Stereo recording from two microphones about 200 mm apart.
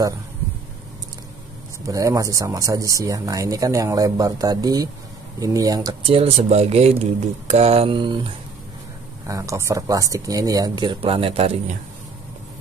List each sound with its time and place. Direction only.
1.9 s speech: 15° right (ahead or behind)
9.3 s speech: 15° right (ahead or behind)